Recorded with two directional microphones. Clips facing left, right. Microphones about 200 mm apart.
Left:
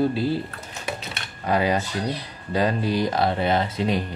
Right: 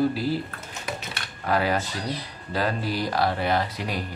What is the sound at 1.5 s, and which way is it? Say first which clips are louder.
Speech: left 2 dB; 20° left (ahead or behind).